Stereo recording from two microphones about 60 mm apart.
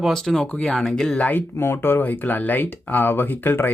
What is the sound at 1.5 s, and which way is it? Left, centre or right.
Speech, left.